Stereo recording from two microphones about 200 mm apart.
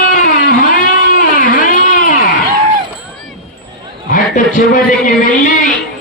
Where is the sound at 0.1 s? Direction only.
40° left (ahead or behind).